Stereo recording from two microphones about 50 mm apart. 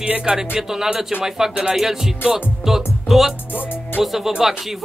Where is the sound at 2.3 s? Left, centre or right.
Centre.